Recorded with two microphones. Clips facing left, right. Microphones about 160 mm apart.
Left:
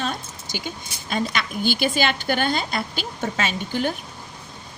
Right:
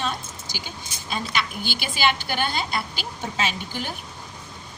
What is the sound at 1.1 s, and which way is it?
A woman's voice, 50° left (ahead or behind).